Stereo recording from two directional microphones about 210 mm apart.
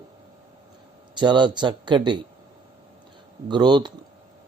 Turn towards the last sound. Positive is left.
turn(degrees=-20)  # may be behind; listen again after turning